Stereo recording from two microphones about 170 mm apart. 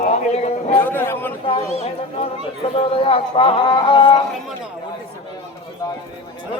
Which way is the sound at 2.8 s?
30° left (ahead or behind).